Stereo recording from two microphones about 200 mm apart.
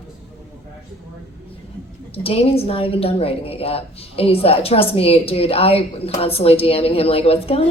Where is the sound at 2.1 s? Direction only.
30° left (ahead or behind).